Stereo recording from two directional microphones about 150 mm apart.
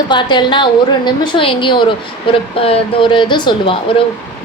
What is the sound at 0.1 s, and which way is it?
A woman's voice, 30° left (ahead or behind).